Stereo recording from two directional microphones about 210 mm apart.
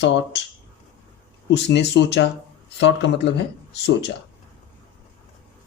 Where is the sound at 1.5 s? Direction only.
55° left (ahead or behind).